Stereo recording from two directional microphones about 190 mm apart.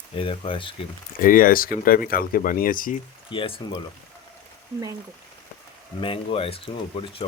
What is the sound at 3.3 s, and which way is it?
Speech, 25° left (ahead or behind).